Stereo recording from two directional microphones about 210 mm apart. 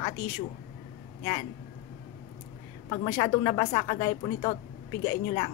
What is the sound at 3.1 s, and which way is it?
A woman's voice, 25° left (ahead or behind).